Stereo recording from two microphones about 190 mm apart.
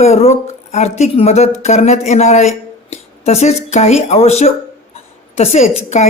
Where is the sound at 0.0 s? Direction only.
35° left (ahead or behind).